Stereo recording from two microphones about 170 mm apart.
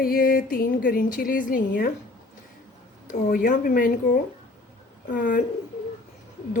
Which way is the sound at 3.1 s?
50° left (ahead or behind).